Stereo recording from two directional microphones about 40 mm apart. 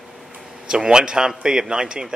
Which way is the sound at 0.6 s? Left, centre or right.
Centre.